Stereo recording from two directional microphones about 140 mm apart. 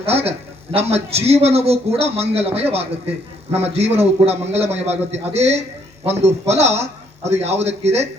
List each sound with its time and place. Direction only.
0.0 s a man's voice: 45° right (ahead or behind)